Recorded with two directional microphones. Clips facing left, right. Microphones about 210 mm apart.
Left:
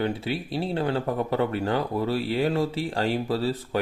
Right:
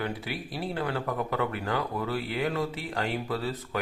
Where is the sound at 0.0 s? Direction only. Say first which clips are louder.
Left 6 dB; 25° left (ahead or behind).